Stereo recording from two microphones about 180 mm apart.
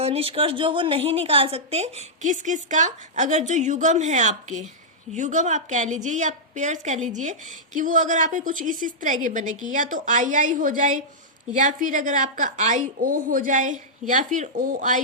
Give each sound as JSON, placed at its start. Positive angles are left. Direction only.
{"t": 0.0, "sound": "a woman's voice", "side_deg": -35}